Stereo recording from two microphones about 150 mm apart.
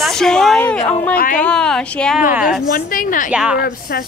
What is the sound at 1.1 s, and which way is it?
Speech, 70° left (ahead or behind).